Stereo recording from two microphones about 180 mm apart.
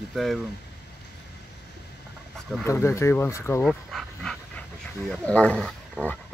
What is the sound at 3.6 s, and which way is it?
Dog, centre (ahead or behind).